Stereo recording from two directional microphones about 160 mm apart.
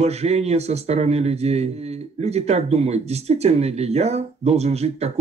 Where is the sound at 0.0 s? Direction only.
40° right (ahead or behind).